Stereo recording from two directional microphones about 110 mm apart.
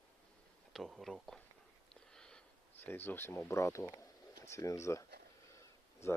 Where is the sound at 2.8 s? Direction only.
20° left (ahead or behind).